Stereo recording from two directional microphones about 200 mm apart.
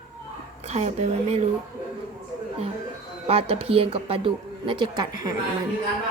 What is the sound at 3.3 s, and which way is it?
A woman's voice, 30° right (ahead or behind).